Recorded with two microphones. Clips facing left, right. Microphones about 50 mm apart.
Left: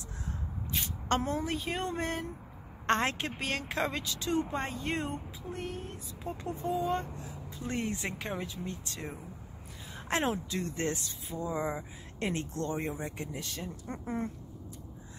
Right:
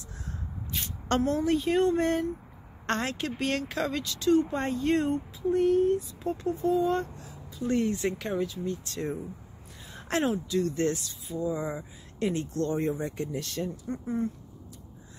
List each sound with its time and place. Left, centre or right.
0.7 s speech: centre
2.9 s speech: left
3.3 s speech: centre
3.6 s speech: left
4.0 s speech: centre
6.3 s speech: left
7.2 s a sound: left
7.7 s speech: centre
8.9 s speech: centre
10.3 s speech: left
10.7 s speech: left
12.2 s speech: left
12.6 s speech: centre
13.8 s speech: left